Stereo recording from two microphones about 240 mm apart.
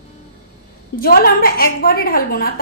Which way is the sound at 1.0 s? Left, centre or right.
Left.